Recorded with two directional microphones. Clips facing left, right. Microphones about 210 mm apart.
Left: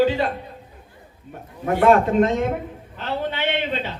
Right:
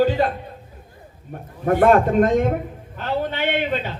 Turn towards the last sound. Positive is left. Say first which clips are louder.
# right 2 dB
turn(degrees=-45)  # may be behind; listen again after turning